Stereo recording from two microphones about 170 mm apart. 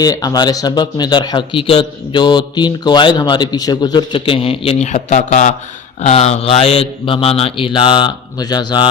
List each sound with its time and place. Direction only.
0.0 s speech: 20° left (ahead or behind)